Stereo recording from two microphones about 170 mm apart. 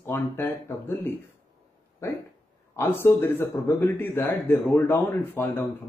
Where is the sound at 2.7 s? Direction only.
15° left (ahead or behind).